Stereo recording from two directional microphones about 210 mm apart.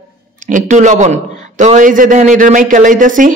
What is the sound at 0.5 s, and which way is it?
A man's voice, 35° right (ahead or behind).